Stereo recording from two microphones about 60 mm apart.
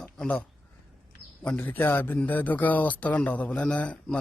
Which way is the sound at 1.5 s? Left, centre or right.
Left.